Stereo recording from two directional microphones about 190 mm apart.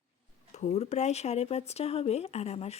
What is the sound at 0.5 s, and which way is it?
Speech, 35° left (ahead or behind).